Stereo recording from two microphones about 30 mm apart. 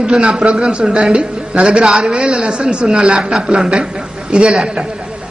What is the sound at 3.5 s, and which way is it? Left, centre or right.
A woman's voice, right.